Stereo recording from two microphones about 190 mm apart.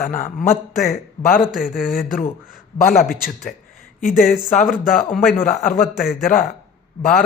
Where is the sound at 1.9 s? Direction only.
45° left (ahead or behind).